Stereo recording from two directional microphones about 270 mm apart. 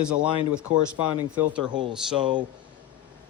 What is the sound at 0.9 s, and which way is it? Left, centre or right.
Speech, left.